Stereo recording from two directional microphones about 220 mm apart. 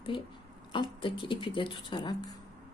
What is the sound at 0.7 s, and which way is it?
Speech, 20° left (ahead or behind).